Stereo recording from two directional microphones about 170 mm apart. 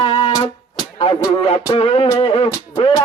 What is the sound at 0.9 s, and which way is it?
Speech, 25° left (ahead or behind).